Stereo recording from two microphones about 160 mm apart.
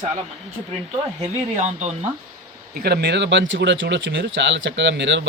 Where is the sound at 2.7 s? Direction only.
80° right.